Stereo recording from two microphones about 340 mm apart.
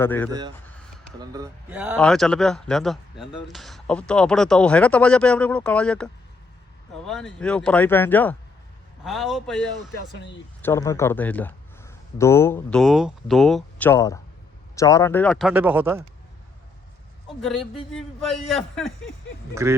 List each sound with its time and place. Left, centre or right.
0.0 s speech: centre
0.3 s speech: centre
10.2 s speech: left
10.6 s speech: centre
17.9 s speech: centre